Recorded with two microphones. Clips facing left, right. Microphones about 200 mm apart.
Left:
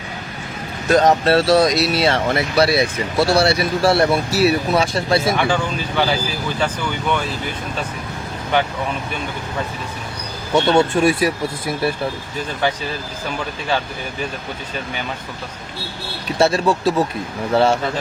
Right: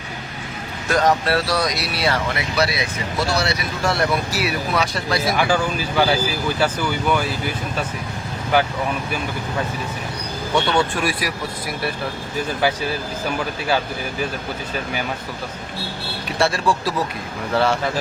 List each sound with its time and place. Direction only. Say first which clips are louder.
0.9 s speech: left 4 dB; 25° left (ahead or behind)
5.4 s speech: even; 5° right (ahead or behind)
10.5 s speech: left 5 dB; 25° left (ahead or behind)
16.4 s speech: left 4 dB; 25° left (ahead or behind)